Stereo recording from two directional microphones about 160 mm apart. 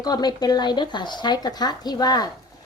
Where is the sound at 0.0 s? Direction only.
25° left (ahead or behind).